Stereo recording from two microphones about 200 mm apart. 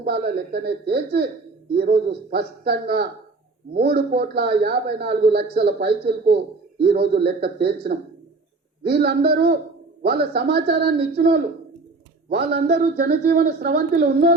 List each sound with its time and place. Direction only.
0.0 s a man's voice: 55° right (ahead or behind)